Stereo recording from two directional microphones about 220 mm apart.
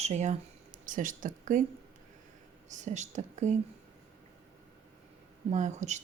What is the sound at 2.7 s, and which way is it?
Speech, 35° right (ahead or behind).